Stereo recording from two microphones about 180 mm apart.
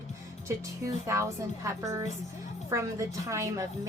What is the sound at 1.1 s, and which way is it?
A woman's voice, 15° right (ahead or behind).